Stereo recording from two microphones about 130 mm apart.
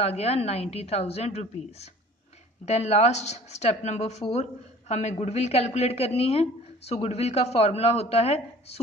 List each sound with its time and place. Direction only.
0.0 s a woman's voice: 55° left (ahead or behind)